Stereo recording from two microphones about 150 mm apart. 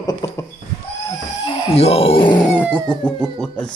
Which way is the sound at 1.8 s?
40° left (ahead or behind).